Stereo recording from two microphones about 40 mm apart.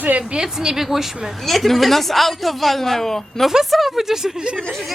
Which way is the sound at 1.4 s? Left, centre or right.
Centre.